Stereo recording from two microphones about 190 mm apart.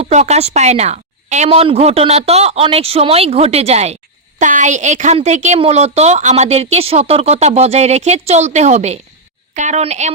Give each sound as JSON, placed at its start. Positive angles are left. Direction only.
{"t": 0.0, "sound": "a woman's voice", "side_deg": -35}